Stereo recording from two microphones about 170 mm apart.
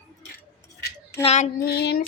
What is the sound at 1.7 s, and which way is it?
Music, 70° left (ahead or behind).